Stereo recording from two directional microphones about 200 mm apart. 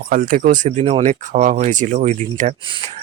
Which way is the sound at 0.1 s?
45° right (ahead or behind).